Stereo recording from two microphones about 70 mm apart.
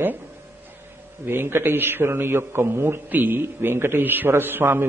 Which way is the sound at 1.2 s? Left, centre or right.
Right.